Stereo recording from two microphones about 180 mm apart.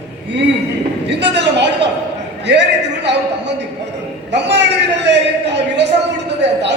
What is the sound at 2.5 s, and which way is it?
Speech, 70° right (ahead or behind).